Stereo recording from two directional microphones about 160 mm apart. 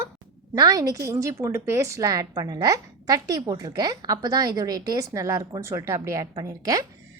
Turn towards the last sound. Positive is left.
turn(degrees=-20)  # may be behind; listen again after turning